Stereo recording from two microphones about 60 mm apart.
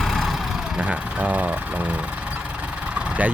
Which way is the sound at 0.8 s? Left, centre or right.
Right.